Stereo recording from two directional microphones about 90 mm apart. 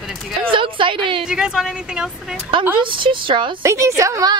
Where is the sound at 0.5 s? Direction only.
70° right (ahead or behind).